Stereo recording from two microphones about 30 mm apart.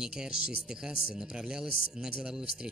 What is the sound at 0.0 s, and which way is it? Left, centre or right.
Speech, right.